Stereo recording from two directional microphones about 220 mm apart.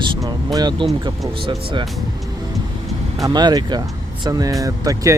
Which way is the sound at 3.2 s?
20° right (ahead or behind).